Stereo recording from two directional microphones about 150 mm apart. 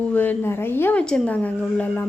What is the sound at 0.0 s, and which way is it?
Speech, 10° left (ahead or behind).